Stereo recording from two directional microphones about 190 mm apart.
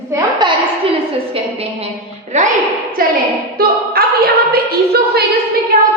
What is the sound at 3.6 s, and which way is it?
A woman's voice, 50° right (ahead or behind).